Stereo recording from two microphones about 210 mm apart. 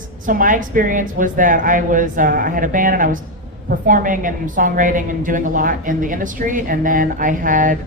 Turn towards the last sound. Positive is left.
turn(degrees=-40)  # may be behind; listen again after turning